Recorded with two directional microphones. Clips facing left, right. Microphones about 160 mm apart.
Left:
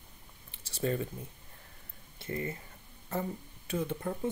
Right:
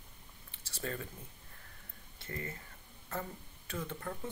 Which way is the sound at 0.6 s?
20° left (ahead or behind).